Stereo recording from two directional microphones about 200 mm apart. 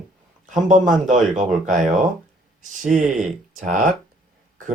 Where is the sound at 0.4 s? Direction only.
40° right (ahead or behind).